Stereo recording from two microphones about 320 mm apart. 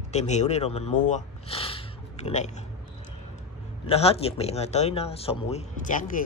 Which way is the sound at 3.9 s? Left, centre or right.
Centre.